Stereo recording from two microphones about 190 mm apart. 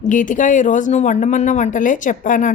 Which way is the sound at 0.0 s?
40° left (ahead or behind).